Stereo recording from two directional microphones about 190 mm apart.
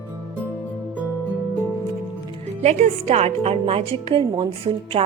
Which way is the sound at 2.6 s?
35° right (ahead or behind).